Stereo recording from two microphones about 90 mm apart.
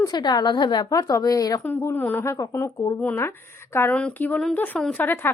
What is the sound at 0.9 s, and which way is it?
Speech, 40° left (ahead or behind).